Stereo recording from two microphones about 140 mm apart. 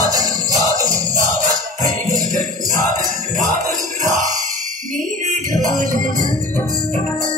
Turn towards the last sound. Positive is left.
turn(degrees=-70)  # may be behind; listen again after turning